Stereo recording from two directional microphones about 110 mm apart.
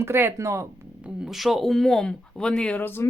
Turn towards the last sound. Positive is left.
turn(degrees=25)  # may be behind; listen again after turning